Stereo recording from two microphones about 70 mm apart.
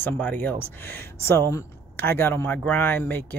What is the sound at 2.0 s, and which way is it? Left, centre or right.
Speech, left.